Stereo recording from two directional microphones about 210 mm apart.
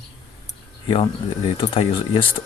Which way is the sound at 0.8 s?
25° left (ahead or behind).